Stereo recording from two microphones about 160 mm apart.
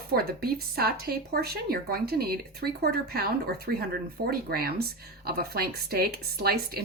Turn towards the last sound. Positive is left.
turn(degrees=-75)  # may be behind; listen again after turning